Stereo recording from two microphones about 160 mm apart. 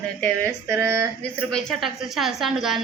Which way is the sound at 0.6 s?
15° right (ahead or behind).